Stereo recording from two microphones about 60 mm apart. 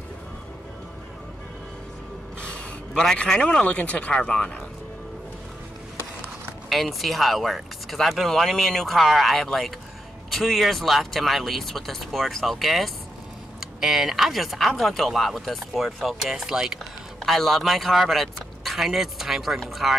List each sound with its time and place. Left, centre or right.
2.9 s a man's voice: centre
6.7 s speech: centre
17.2 s speech: centre